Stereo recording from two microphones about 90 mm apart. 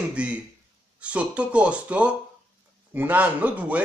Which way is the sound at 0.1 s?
15° right (ahead or behind).